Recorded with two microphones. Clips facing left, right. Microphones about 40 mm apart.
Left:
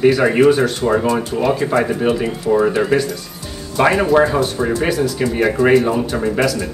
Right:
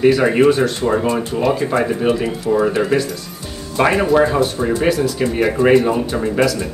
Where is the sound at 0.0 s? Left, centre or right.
Centre.